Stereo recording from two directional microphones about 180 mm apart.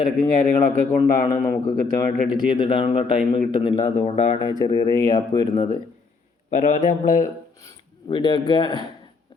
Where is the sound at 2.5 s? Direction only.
30° left (ahead or behind).